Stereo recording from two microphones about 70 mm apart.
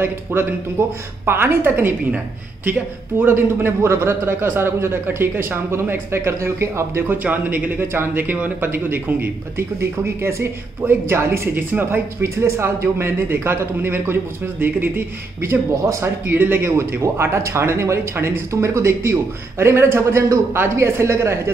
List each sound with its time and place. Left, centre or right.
0.0 s speech: right
7.2 s speech: right
16.3 s speech: right
16.7 s speech: right